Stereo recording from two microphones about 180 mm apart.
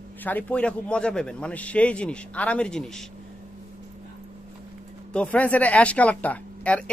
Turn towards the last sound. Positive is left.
turn(degrees=5)  # may be behind; listen again after turning